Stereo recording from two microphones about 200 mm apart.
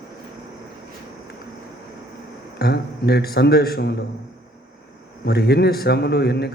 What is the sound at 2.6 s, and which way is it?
A man's voice, 50° left (ahead or behind).